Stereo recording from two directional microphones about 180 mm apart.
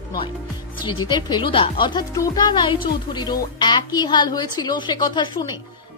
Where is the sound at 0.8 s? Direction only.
25° left (ahead or behind).